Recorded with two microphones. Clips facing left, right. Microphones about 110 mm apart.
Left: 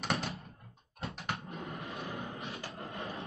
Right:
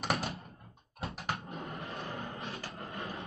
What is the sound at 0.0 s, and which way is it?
Door, centre (ahead or behind).